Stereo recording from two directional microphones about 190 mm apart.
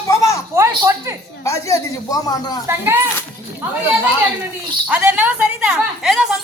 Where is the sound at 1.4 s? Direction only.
15° left (ahead or behind).